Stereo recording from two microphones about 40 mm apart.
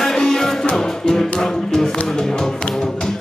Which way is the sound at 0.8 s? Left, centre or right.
Centre.